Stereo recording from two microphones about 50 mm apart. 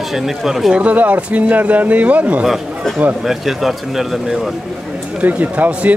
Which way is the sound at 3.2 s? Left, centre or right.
Centre.